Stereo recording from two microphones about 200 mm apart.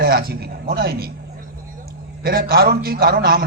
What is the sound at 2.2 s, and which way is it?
A man's voice, 50° right (ahead or behind).